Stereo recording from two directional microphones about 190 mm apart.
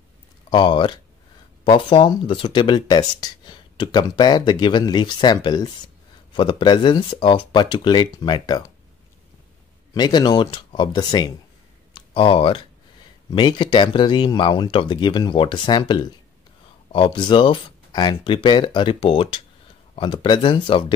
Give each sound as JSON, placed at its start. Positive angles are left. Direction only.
{"t": 0.5, "sound": "speech", "side_deg": 25}
{"t": 9.9, "sound": "speech", "side_deg": 20}